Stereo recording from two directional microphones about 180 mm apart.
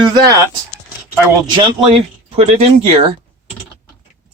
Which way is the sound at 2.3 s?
35° right (ahead or behind).